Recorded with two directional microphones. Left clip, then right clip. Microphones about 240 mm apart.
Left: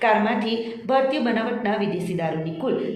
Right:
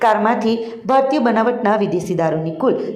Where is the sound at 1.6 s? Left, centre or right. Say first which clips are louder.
Right 8 dB; right.